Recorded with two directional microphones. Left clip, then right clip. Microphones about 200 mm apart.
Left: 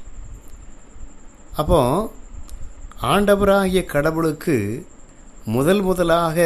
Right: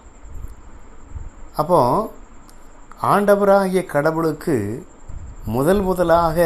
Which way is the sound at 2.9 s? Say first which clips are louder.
Right 3 dB; 35° left (ahead or behind).